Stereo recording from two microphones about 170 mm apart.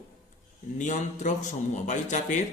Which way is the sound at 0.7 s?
45° left (ahead or behind).